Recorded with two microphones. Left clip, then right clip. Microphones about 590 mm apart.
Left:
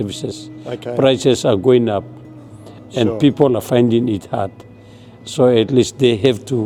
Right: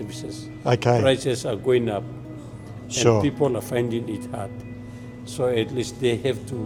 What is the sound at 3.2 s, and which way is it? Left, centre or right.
A man's voice, left.